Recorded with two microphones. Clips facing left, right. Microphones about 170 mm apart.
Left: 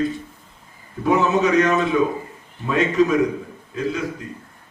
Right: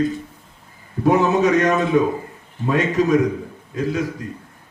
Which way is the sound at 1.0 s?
45° right (ahead or behind).